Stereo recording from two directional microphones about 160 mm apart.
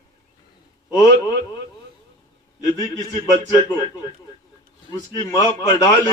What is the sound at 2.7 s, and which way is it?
Speech, 20° left (ahead or behind).